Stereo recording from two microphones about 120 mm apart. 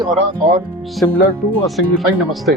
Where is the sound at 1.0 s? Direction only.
20° left (ahead or behind).